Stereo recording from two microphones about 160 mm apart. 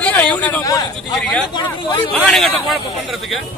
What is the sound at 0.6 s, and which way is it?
Speech, 20° left (ahead or behind).